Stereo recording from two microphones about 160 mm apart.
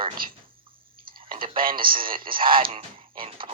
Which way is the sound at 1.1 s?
30° right (ahead or behind).